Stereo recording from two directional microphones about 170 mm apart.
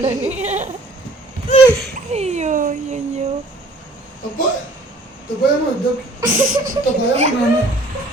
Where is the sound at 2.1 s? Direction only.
40° right (ahead or behind).